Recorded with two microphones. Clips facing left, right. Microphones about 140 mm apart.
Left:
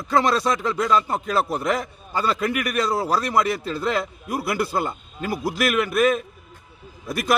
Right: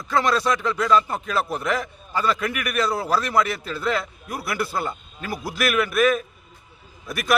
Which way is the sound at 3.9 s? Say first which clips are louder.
Left 2 dB; 25° left (ahead or behind).